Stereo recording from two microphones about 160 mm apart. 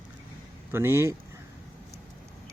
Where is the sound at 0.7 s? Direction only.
15° right (ahead or behind).